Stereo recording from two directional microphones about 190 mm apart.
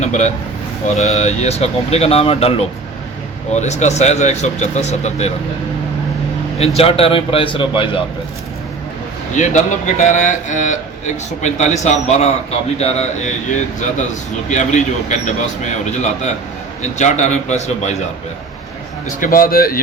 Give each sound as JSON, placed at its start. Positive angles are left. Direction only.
{"t": 0.0, "sound": "a man's voice", "side_deg": 35}
{"t": 6.6, "sound": "a man's voice", "side_deg": 30}
{"t": 9.3, "sound": "a man's voice", "side_deg": 40}
{"t": 19.0, "sound": "speech", "side_deg": 45}